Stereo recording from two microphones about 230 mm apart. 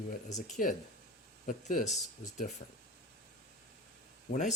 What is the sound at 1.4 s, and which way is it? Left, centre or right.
Speech, left.